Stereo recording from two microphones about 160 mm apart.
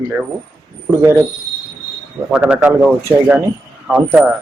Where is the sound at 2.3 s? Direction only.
10° right (ahead or behind).